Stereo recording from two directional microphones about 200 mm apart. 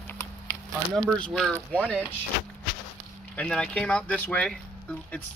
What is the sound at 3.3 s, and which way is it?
Speech, 5° left (ahead or behind).